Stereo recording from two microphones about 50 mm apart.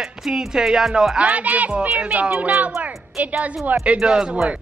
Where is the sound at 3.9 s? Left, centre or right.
Centre.